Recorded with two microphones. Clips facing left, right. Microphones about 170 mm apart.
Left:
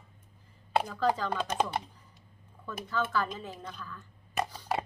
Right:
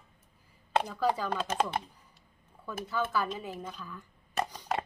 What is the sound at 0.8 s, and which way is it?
Speech, 10° right (ahead or behind).